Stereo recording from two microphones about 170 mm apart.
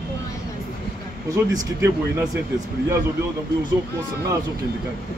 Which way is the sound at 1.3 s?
20° right (ahead or behind).